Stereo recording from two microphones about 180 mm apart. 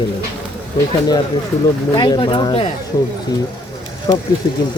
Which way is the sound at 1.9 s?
25° left (ahead or behind).